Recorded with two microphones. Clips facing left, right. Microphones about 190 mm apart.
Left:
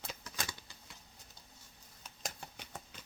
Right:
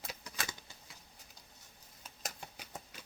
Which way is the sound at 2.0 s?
5° right (ahead or behind).